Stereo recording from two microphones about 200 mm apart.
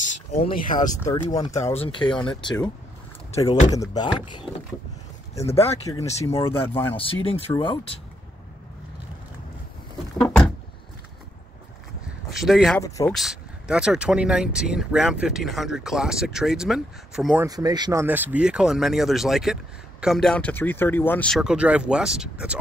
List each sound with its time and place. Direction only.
0.0 s speech: 35° left (ahead or behind)
1.3 s speech: 20° left (ahead or behind)
1.6 s speech: 30° left (ahead or behind)
5.3 s speech: 15° left (ahead or behind)
7.0 s speech: 25° left (ahead or behind)
10.1 s speech: 5° left (ahead or behind)
12.4 s speech: centre (ahead or behind)
12.8 s speech: 15° left (ahead or behind)
13.1 s speech: centre (ahead or behind)
17.5 s speech: 20° right (ahead or behind)
18.0 s speech: 10° right (ahead or behind)